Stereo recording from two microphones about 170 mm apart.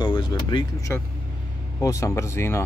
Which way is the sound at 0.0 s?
25° left (ahead or behind).